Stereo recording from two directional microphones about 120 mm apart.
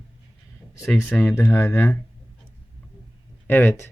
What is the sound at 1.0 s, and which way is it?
Speech, 15° left (ahead or behind).